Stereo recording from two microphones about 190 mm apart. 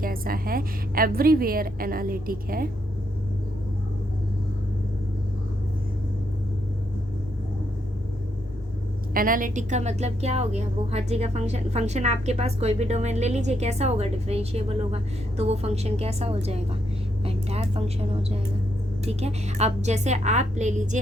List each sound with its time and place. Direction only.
0.0 s a woman's voice: 50° right (ahead or behind)
9.1 s a woman's voice: 45° right (ahead or behind)